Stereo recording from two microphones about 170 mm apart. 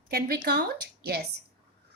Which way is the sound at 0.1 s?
75° right (ahead or behind).